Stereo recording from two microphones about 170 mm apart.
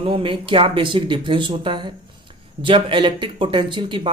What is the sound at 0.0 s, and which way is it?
Speech, 30° right (ahead or behind).